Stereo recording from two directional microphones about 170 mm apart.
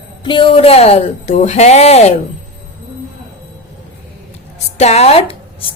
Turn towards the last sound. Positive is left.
turn(degrees=35)  # may be behind; listen again after turning